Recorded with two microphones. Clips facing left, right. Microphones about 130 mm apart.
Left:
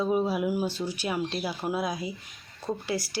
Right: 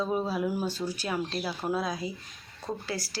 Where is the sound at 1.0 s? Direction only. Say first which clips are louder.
Left 3 dB; 20° left (ahead or behind).